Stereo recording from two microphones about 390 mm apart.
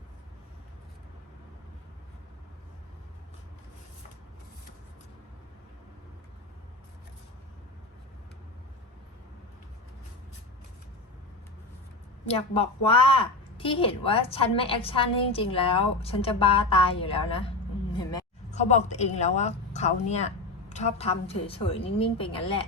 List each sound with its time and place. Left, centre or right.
12.3 s a woman's voice: centre